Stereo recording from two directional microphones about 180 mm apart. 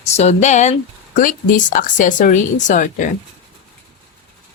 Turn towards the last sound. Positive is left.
turn(degrees=45)  # may be behind; listen again after turning